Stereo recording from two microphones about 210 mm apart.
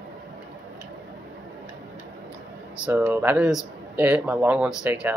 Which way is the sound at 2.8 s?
10° right (ahead or behind).